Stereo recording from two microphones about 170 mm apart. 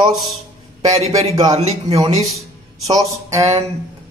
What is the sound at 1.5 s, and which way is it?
Speech, 40° right (ahead or behind).